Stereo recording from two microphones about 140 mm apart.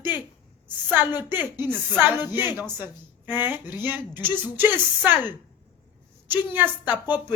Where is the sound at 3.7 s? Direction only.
15° right (ahead or behind).